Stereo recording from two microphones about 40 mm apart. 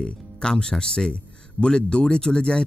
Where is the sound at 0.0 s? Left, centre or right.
Left.